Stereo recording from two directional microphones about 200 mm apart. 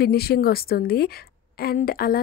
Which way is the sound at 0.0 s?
50° left (ahead or behind).